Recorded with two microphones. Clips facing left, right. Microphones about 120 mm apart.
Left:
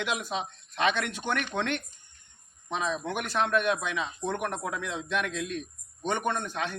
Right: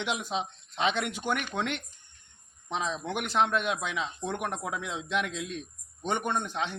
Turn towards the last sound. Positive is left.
turn(degrees=-20)  # may be behind; listen again after turning